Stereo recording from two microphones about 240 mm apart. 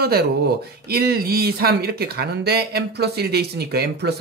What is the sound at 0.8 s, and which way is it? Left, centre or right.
Speech, right.